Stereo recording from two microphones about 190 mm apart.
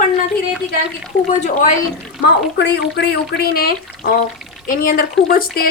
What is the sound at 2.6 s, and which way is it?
Speech, 60° left (ahead or behind).